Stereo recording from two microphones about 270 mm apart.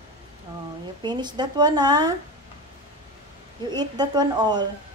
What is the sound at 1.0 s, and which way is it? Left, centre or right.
Speech, centre.